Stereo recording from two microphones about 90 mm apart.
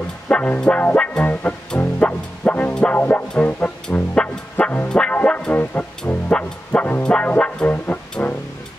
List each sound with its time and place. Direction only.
0.3 s music: 15° left (ahead or behind)